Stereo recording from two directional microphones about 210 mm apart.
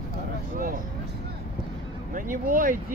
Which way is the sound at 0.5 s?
40° right (ahead or behind).